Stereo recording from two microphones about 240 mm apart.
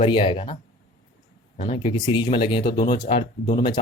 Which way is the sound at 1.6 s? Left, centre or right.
Left.